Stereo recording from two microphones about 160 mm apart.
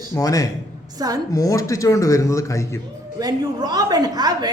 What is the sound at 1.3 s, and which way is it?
A man's voice, 20° left (ahead or behind).